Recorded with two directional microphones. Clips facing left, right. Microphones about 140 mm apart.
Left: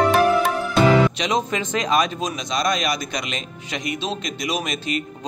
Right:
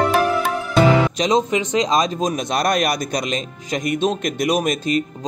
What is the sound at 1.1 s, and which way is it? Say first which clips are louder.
Music: right 5 dB; 35° right (ahead or behind).